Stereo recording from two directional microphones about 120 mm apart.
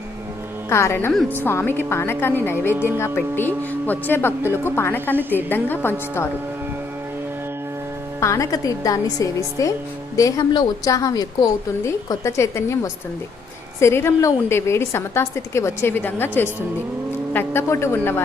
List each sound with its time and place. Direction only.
0.7 s a woman's voice: 20° left (ahead or behind)
2.7 s speech: 15° right (ahead or behind)
3.0 s speech: 15° left (ahead or behind)
8.2 s a woman's voice: 25° left (ahead or behind)